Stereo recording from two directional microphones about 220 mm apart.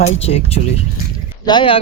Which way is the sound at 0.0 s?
30° left (ahead or behind).